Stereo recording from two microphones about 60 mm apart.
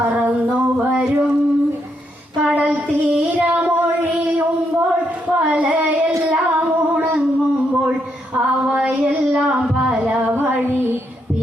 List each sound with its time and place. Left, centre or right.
0.1 s singing: right
2.6 s child singing: right
5.5 s child singing: right
6.2 s singing: right
8.4 s a sound: centre
9.6 s music: centre
10.3 s female singing: right